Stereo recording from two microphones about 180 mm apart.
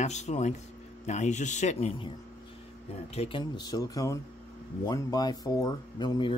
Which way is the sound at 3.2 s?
30° left (ahead or behind).